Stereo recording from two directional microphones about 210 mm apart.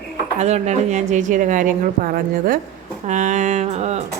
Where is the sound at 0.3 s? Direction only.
30° right (ahead or behind).